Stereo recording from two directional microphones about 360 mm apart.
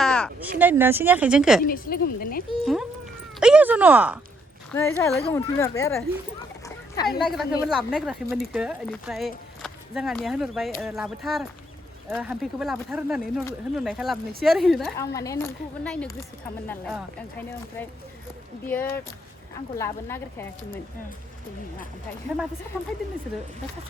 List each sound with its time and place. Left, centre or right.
0.0 s a sound: centre
0.6 s speech: centre
1.6 s speech: left
3.4 s speech: centre
6.7 s a sound: centre
7.3 s speech: centre